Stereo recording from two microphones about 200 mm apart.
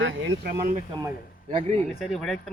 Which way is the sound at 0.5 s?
40° right (ahead or behind).